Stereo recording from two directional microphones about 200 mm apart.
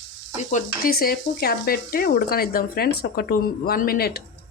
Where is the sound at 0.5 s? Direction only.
50° left (ahead or behind).